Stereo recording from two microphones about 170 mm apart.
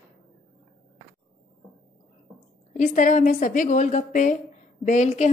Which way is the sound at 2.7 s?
50° left (ahead or behind).